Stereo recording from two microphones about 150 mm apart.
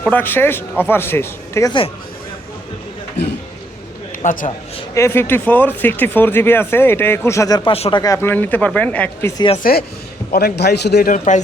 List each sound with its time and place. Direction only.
0.1 s speech: 15° left (ahead or behind)
4.2 s a man's voice: 55° left (ahead or behind)
4.9 s speech: 15° left (ahead or behind)
7.7 s speech: 35° left (ahead or behind); by 9.3 s 10° left (ahead or behind)
9.6 s speech: 75° left (ahead or behind)
10.3 s a man's voice: 90° left; by 11.4 s 55° left (ahead or behind)